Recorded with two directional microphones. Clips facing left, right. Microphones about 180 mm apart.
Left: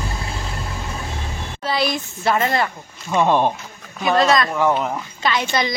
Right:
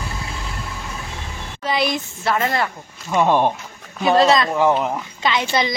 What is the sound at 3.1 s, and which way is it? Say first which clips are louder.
Speech: even; 10° right (ahead or behind).